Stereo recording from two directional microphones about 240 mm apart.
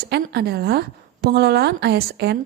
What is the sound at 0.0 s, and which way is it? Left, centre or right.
A woman's voice, right.